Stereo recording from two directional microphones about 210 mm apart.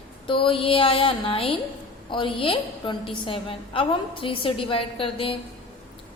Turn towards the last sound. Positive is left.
turn(degrees=25)  # may be behind; listen again after turning